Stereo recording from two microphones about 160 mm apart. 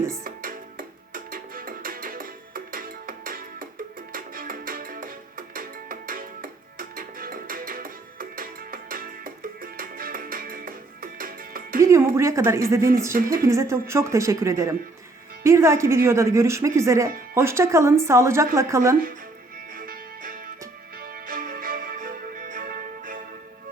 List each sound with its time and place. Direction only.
0.3 s music: 65° right (ahead or behind)
11.8 s speech: 20° right (ahead or behind)
19.7 s music: 65° right (ahead or behind)